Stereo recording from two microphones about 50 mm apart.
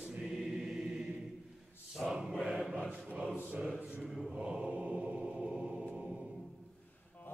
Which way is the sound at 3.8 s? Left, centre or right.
Right.